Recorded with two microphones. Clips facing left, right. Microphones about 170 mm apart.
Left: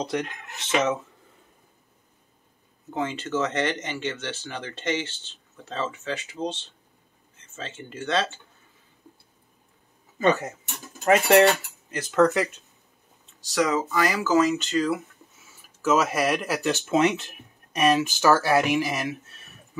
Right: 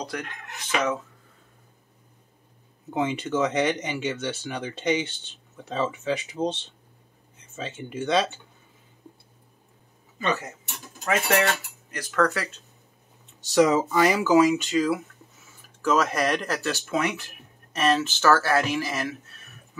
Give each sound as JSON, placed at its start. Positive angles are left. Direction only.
{"t": 0.0, "sound": "speech", "side_deg": 25}
{"t": 2.9, "sound": "speech", "side_deg": -15}
{"t": 6.4, "sound": "speech", "side_deg": -30}
{"t": 7.3, "sound": "speech", "side_deg": -10}
{"t": 11.9, "sound": "speech", "side_deg": 25}
{"t": 13.4, "sound": "speech", "side_deg": -25}
{"t": 15.8, "sound": "speech", "side_deg": 5}
{"t": 16.8, "sound": "speech", "side_deg": 25}
{"t": 17.7, "sound": "speech", "side_deg": 15}